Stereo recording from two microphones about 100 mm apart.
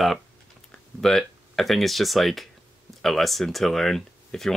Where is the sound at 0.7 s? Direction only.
5° left (ahead or behind).